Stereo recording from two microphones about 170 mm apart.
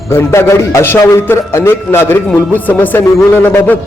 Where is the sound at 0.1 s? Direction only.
15° left (ahead or behind).